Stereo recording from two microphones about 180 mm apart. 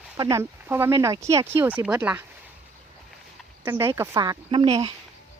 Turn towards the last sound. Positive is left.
turn(degrees=-25)  # may be behind; listen again after turning